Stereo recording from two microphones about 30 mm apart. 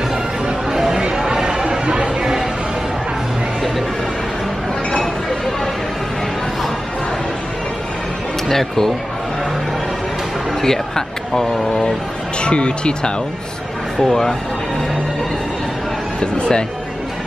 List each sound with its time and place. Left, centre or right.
0.7 s chatter: centre
8.5 s speech: centre
10.6 s a sound: centre
12.4 s speech: left
14.0 s speech: centre
16.2 s speech: left